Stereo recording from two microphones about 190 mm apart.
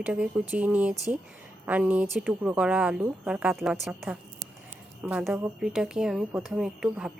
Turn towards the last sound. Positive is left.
turn(degrees=-5)  # may be behind; listen again after turning